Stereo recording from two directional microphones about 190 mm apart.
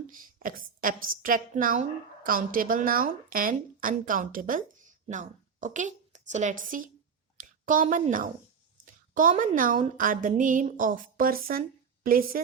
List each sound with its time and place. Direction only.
0.1 s a woman's voice: 45° right (ahead or behind)